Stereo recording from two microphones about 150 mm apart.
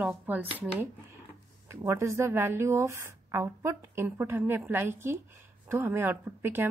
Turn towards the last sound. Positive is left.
turn(degrees=-15)  # may be behind; listen again after turning